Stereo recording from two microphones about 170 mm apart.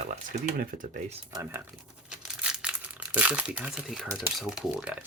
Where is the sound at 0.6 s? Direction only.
55° right (ahead or behind).